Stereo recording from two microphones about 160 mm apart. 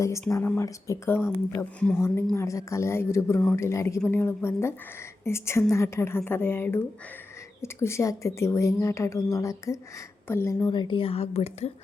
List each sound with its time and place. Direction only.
0.0 s a woman's voice: 20° left (ahead or behind); by 11.7 s 40° left (ahead or behind)